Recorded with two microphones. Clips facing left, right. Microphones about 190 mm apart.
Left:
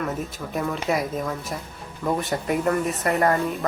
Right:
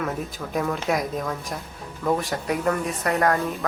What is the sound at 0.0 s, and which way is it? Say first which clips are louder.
Speech: even; centre (ahead or behind).